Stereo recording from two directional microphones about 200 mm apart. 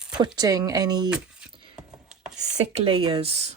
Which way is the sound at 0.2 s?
20° right (ahead or behind).